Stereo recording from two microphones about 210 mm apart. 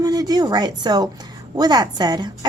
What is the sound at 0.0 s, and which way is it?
A woman's voice, 20° right (ahead or behind).